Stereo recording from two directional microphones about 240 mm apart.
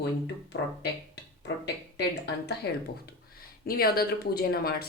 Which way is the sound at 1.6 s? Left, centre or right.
Left.